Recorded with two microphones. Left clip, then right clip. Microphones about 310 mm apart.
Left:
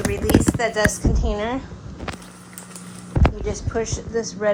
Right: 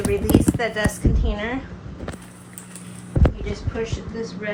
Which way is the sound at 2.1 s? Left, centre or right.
Centre.